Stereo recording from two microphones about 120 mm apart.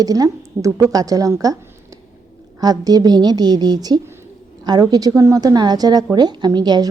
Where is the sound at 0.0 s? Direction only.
30° right (ahead or behind).